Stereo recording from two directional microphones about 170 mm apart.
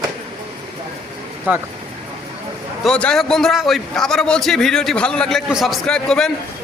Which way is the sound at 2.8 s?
5° left (ahead or behind).